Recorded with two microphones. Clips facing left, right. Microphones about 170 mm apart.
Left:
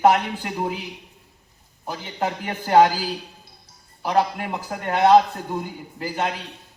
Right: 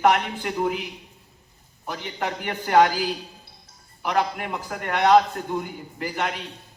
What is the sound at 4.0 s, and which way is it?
A man's voice, 35° left (ahead or behind).